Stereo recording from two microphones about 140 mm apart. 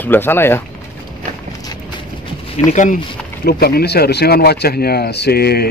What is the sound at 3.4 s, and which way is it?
Speech, 90° left.